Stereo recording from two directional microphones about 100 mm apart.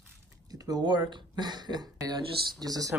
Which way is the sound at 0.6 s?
40° right (ahead or behind).